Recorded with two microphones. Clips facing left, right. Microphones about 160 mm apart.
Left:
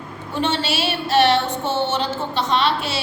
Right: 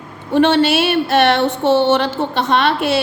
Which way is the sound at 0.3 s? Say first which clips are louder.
Right 10 dB; 60° right (ahead or behind).